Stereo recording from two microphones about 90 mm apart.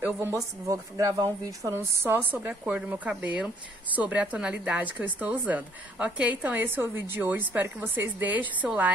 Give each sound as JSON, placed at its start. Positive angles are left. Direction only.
{"t": 0.0, "sound": "speech", "side_deg": -30}
{"t": 2.0, "sound": "a woman's voice", "side_deg": -25}